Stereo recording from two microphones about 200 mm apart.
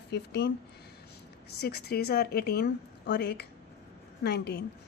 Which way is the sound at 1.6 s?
55° left (ahead or behind).